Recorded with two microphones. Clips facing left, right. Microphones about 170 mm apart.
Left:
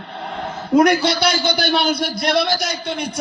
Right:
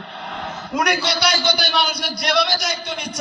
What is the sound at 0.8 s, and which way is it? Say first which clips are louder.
A man's voice: left 5 dB; 50° left (ahead or behind).